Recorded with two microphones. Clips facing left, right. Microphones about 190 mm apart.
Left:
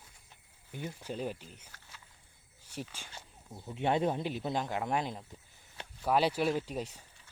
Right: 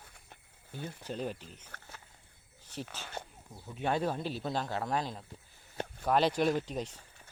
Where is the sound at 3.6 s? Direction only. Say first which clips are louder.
Left 2 dB; 25° left (ahead or behind).